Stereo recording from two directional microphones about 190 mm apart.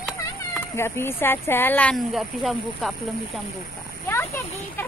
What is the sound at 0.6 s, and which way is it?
Speech, 10° left (ahead or behind).